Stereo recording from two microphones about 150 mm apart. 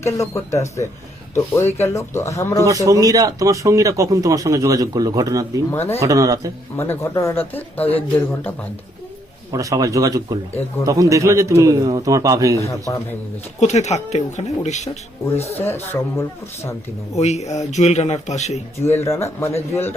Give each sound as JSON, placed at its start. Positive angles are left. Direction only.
{"t": 0.0, "sound": "speech", "side_deg": 20}
{"t": 2.6, "sound": "speech", "side_deg": -20}
{"t": 6.7, "sound": "speech", "side_deg": 20}
{"t": 9.5, "sound": "speech", "side_deg": -20}
{"t": 12.5, "sound": "speech", "side_deg": 20}
{"t": 13.6, "sound": "a man's voice", "side_deg": 50}
{"t": 15.6, "sound": "speech", "side_deg": 15}
{"t": 17.2, "sound": "a man's voice", "side_deg": 45}
{"t": 18.9, "sound": "speech", "side_deg": 15}